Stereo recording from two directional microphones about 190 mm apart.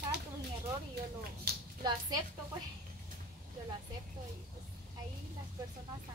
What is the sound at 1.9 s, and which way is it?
Speech, 20° right (ahead or behind).